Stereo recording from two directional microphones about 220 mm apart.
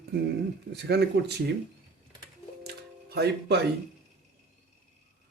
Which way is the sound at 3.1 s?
50° right (ahead or behind).